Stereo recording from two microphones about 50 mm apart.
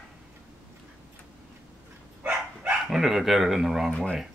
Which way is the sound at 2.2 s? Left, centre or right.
Right.